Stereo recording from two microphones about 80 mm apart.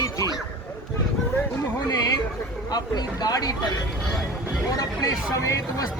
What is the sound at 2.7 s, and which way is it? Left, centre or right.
Speech, left.